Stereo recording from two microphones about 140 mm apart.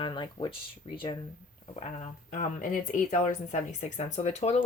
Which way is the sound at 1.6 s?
50° left (ahead or behind).